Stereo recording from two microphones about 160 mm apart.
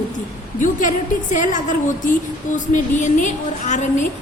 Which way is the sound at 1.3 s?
50° left (ahead or behind).